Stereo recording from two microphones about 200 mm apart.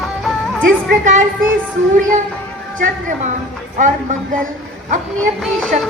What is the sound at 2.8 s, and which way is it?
Speech, 40° right (ahead or behind).